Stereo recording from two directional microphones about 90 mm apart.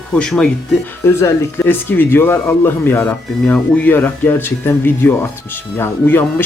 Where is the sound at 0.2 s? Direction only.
10° left (ahead or behind).